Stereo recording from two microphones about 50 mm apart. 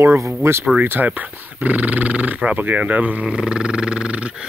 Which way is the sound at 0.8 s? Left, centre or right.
Right.